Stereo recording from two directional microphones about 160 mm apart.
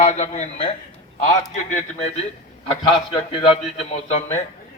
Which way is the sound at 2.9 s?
35° left (ahead or behind).